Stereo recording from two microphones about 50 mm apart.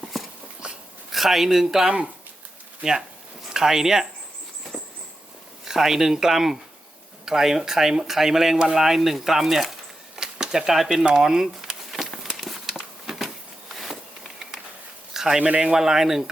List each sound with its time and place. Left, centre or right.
0.1 s dog: centre
1.1 s speech: centre
5.6 s speech: centre
10.2 s a sound: centre
15.1 s a sound: centre
15.4 s speech: right
15.7 s speech: centre